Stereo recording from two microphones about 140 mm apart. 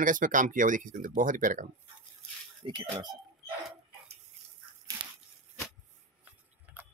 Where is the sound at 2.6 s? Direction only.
30° right (ahead or behind).